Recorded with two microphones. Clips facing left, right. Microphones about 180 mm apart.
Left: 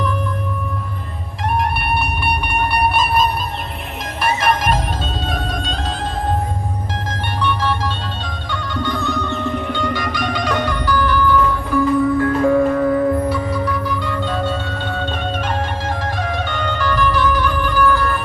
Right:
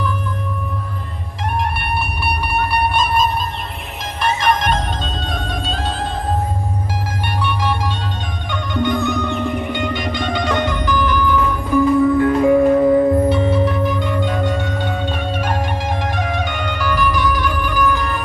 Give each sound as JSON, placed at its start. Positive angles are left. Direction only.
{"t": 2.9, "sound": "music", "side_deg": 5}
{"t": 7.1, "sound": "music", "side_deg": -10}